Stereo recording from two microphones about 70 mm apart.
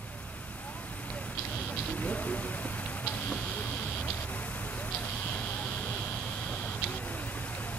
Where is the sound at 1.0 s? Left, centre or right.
Centre.